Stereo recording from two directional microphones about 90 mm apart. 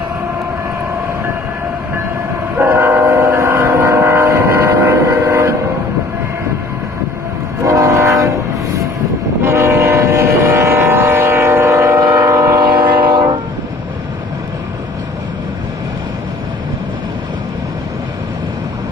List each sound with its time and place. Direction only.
2.5 s train: 20° right (ahead or behind)
7.6 s train: 35° right (ahead or behind)
9.4 s train: 30° right (ahead or behind); by 13.4 s 55° right (ahead or behind)